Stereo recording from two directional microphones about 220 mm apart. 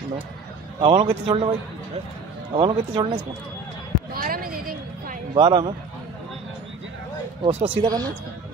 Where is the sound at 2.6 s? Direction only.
20° right (ahead or behind).